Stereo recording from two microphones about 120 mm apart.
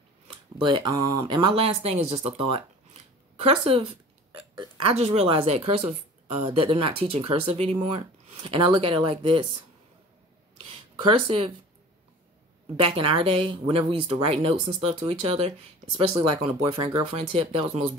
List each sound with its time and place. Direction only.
0.3 s a sound: 45° right (ahead or behind)
0.8 s speech: 30° right (ahead or behind)
1.2 s speech: 45° right (ahead or behind)
4.6 s burping: 45° right (ahead or behind)
4.9 s speech: 60° right (ahead or behind)
10.6 s a sound: 50° right (ahead or behind)
12.8 s speech: 50° right (ahead or behind)
16.6 s speech: 45° right (ahead or behind)
17.1 s speech: 65° right (ahead or behind)
17.5 s speech: 50° right (ahead or behind)